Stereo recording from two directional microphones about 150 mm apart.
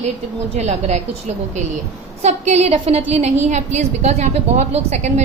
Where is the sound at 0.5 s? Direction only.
50° right (ahead or behind).